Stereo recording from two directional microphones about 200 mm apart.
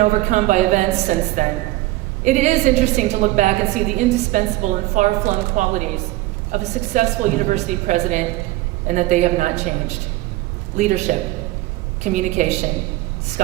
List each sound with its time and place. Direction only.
0.0 s a woman's voice: 40° right (ahead or behind)
10.8 s a woman's voice: 35° right (ahead or behind)